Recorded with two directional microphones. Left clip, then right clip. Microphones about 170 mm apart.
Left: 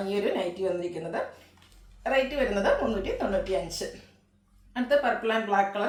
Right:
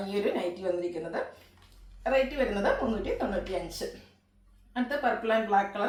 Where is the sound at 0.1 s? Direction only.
20° left (ahead or behind).